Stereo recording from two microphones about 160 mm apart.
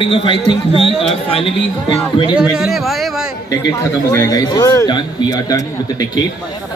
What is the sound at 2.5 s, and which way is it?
Speech, centre (ahead or behind).